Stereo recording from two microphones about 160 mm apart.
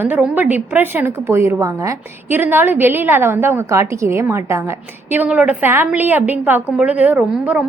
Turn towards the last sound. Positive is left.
turn(degrees=-10)  # may be behind; listen again after turning